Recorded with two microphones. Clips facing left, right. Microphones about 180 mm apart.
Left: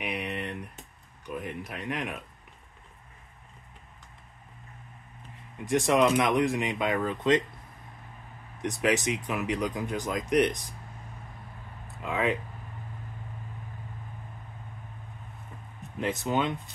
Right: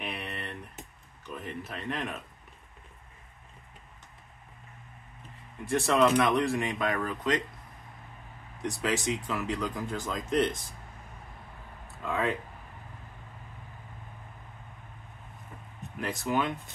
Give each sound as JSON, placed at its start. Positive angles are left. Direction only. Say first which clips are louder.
{"t": 0.0, "sound": "a sound", "louder": "left 4 dB", "side_deg": 15}
{"t": 1.2, "sound": "speech", "louder": "left 3 dB", "side_deg": 10}
{"t": 5.7, "sound": "speech", "louder": "left 1 dB", "side_deg": 15}
{"t": 8.5, "sound": "speech", "louder": "left 4 dB", "side_deg": 20}
{"t": 12.0, "sound": "speech", "louder": "left 2 dB", "side_deg": 20}
{"t": 16.0, "sound": "speech", "louder": "left 2 dB", "side_deg": 20}